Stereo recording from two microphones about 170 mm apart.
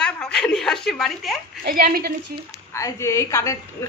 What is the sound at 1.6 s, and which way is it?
Speech, 65° right (ahead or behind).